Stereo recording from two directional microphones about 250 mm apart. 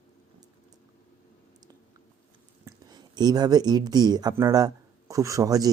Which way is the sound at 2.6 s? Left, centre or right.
Centre.